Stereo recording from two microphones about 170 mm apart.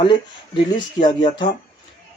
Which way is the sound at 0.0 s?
30° left (ahead or behind).